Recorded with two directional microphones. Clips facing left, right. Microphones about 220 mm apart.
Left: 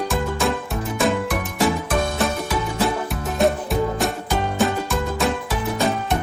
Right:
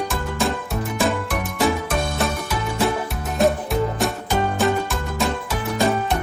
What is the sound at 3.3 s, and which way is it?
Music, centre (ahead or behind).